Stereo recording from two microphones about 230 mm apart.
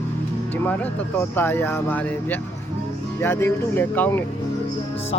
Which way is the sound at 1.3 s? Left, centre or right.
Centre.